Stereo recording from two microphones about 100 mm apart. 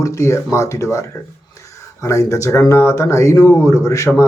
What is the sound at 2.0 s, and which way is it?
Speech, 30° left (ahead or behind).